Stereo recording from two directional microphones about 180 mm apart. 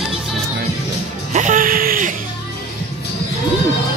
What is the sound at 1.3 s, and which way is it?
Music, 45° right (ahead or behind).